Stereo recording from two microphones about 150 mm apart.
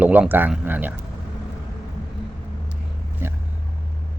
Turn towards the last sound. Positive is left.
turn(degrees=-15)  # may be behind; listen again after turning